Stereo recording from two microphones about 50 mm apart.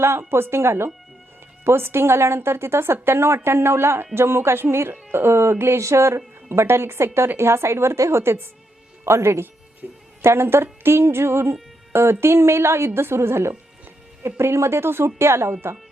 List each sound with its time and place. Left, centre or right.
0.3 s speech: right
9.8 s speech: right
10.2 s speech: right